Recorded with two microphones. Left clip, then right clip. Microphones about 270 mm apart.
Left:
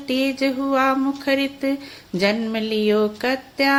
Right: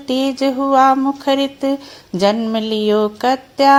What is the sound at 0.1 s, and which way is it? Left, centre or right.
Speech, centre.